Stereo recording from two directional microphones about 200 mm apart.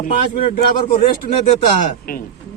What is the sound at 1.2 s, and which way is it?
Speech, 35° left (ahead or behind).